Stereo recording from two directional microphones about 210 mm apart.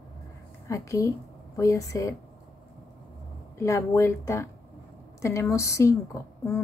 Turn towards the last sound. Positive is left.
turn(degrees=15)  # may be behind; listen again after turning